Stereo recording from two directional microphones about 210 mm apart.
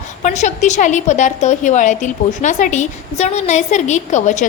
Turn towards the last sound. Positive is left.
turn(degrees=35)  # may be behind; listen again after turning